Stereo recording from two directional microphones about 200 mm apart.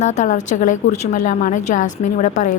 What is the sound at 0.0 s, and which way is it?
A woman's voice, 35° left (ahead or behind).